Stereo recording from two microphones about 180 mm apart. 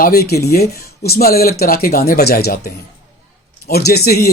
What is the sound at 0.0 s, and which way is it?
Speech, 60° left (ahead or behind).